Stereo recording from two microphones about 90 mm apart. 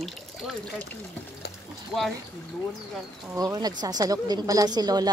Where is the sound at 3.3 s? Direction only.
45° right (ahead or behind).